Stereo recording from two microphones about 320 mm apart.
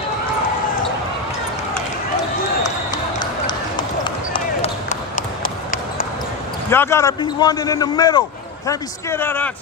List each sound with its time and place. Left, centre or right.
2.6 s basketball bounce: centre
4.3 s a sound: left
6.7 s a man's voice: centre